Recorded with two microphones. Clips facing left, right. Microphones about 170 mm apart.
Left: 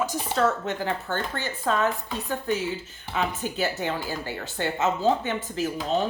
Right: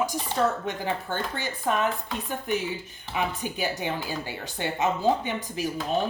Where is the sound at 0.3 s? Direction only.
15° right (ahead or behind).